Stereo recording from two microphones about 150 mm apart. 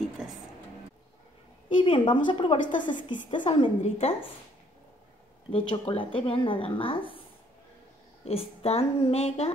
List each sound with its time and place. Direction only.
1.8 s speech: 35° left (ahead or behind)
5.5 s speech: 35° left (ahead or behind)
8.3 s speech: 40° left (ahead or behind)